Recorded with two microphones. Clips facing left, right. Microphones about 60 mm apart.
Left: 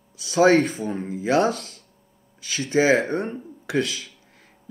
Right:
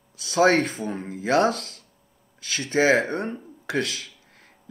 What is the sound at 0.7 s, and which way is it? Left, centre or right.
Speech, right.